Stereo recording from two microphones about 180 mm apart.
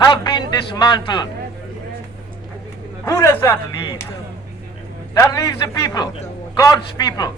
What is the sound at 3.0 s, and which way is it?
Speech, 15° left (ahead or behind).